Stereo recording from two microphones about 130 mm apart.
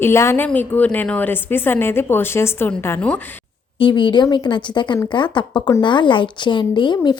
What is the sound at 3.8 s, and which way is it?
A woman's voice, 35° left (ahead or behind).